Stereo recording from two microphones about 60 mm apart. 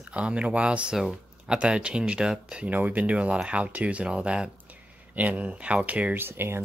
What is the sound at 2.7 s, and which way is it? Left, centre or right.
Speech, right.